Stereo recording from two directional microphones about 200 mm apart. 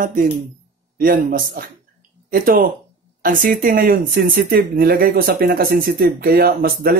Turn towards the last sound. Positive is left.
turn(degrees=-50)  # may be behind; listen again after turning